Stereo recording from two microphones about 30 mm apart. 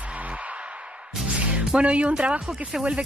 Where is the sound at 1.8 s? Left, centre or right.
Right.